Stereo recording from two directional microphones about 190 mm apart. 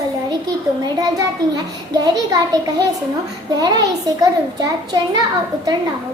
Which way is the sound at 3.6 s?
20° right (ahead or behind).